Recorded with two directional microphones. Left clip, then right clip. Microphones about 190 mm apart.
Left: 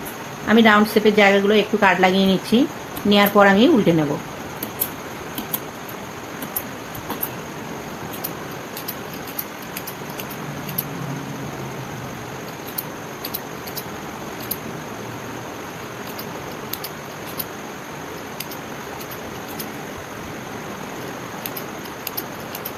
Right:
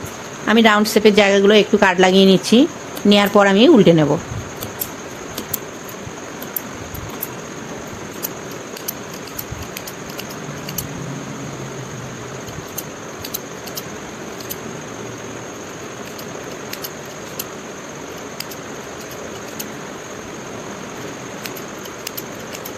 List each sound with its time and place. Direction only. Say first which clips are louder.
0.4 s speech: right 1 dB; 60° right (ahead or behind)